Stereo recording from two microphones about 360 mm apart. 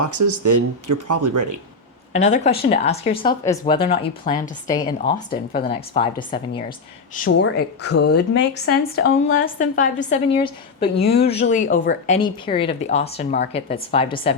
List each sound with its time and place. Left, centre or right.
0.0 s speech: right
2.1 s speech: centre
7.3 s a woman's voice: left; by 14.3 s centre